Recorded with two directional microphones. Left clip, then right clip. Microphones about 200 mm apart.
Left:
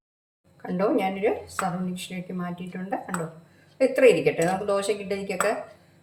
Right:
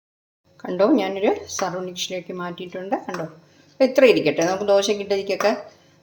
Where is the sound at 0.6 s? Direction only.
40° right (ahead or behind).